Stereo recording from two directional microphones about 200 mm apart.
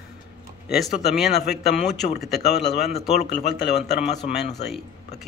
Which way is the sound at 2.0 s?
40° left (ahead or behind).